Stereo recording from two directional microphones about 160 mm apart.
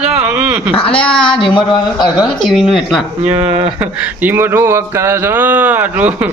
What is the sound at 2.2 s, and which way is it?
Speech, centre (ahead or behind).